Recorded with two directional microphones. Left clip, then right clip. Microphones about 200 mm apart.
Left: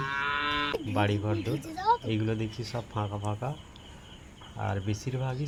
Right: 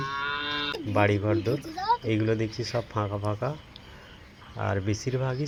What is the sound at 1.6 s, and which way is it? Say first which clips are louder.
Speech: even; 35° left (ahead or behind).